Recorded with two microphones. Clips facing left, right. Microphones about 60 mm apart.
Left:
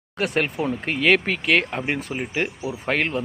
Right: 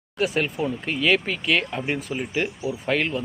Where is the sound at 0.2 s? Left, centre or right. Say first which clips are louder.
Even; left.